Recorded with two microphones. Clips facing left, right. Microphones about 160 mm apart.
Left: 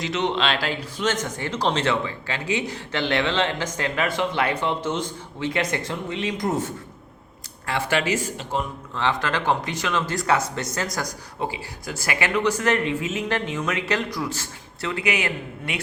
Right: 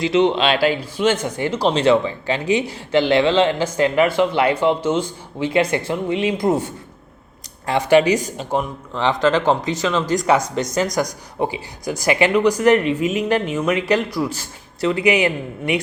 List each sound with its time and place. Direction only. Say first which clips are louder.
0.0 s speech: right 8 dB; 10° right (ahead or behind)
7.7 s speech: right 9 dB; 15° right (ahead or behind)